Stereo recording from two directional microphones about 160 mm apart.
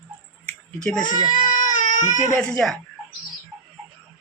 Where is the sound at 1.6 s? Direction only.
55° left (ahead or behind).